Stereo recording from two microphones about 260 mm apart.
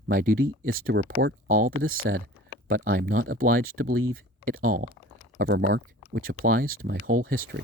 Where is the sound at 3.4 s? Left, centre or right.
Right.